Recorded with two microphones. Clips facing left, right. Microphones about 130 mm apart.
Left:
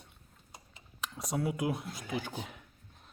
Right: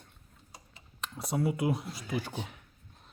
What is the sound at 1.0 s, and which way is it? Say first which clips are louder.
Speech: right 3 dB; centre (ahead or behind).